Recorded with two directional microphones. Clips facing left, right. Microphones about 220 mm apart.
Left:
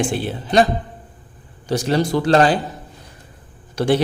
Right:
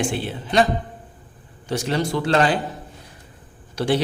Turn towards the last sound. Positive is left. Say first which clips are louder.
# left 4 dB
turn(degrees=50)  # may be behind; listen again after turning